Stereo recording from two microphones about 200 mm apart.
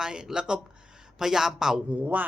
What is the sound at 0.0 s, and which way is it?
Speech, 5° right (ahead or behind).